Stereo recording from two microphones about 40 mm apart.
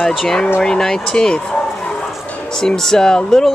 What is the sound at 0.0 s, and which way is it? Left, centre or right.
Speech, centre.